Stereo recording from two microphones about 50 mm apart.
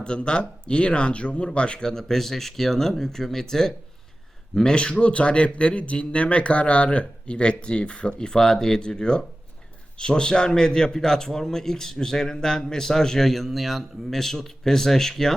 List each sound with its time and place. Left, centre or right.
0.0 s a man's voice: centre